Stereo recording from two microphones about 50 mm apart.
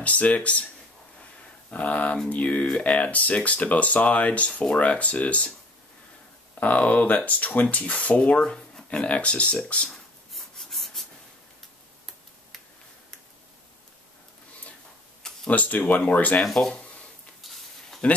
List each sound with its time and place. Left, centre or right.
0.0 s speech: left
1.7 s speech: left
6.6 s speech: left
9.8 s writing: centre
15.4 s speech: left
17.4 s a sound: centre